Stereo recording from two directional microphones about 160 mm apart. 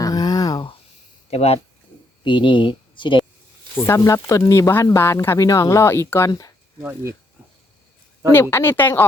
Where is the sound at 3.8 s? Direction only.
20° left (ahead or behind).